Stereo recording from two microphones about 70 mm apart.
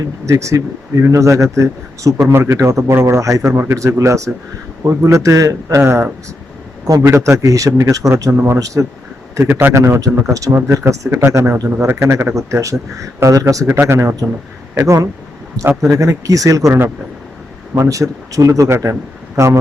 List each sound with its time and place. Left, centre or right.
0.3 s a man's voice: right
8.3 s a man's voice: right
8.5 s a man's voice: right
9.5 s a man's voice: right
9.7 s a man's voice: right
11.5 s a man's voice: right
11.9 s a man's voice: right
13.7 s a man's voice: right
17.7 s a man's voice: right